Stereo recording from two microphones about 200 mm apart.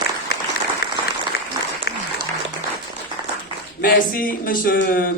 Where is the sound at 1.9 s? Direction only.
55° left (ahead or behind).